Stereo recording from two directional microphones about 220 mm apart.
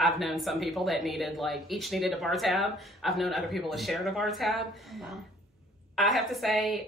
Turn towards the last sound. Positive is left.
turn(degrees=0)  # may be behind; listen again after turning